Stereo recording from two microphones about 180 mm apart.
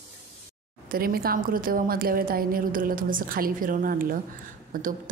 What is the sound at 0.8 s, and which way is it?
A woman's voice, 55° right (ahead or behind).